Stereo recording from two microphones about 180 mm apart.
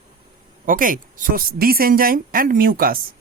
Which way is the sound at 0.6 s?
50° right (ahead or behind).